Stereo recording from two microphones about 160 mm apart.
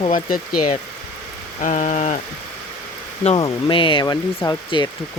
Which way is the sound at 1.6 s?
50° left (ahead or behind).